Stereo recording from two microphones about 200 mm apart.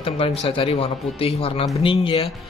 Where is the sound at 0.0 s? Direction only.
30° left (ahead or behind).